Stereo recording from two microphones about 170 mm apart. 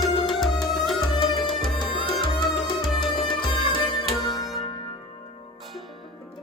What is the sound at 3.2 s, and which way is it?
Music, 30° left (ahead or behind).